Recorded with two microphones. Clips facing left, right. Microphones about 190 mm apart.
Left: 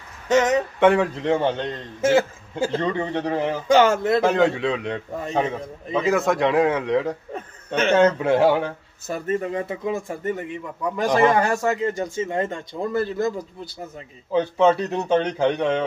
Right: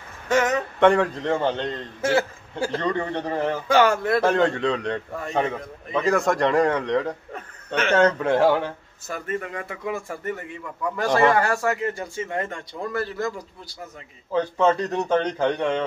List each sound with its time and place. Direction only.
0.3 s a man's voice: 20° left (ahead or behind)
0.7 s speech: 5° left (ahead or behind)
2.0 s a man's voice: 20° left (ahead or behind)
3.7 s a man's voice: 20° left (ahead or behind)
4.2 s speech: 10° left (ahead or behind)
7.3 s a sound: 25° left (ahead or behind)
8.0 s speech: 5° left (ahead or behind)
9.1 s a man's voice: 25° left (ahead or behind)
14.3 s speech: 10° left (ahead or behind)